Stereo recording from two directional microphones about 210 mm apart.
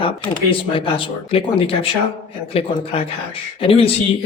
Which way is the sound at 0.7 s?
25° left (ahead or behind).